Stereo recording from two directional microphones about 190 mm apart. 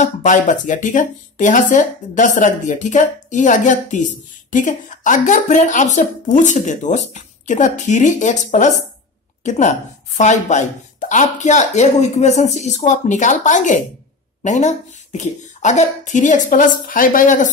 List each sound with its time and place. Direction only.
0.0 s speech: 40° left (ahead or behind)